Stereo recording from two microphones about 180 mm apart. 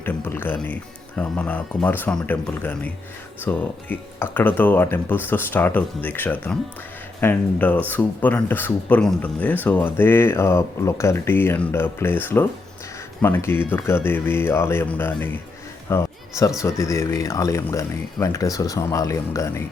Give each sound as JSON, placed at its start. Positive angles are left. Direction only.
{"t": 0.0, "sound": "speech", "side_deg": 10}
{"t": 15.9, "sound": "a sound", "side_deg": 15}
{"t": 16.6, "sound": "speech", "side_deg": 15}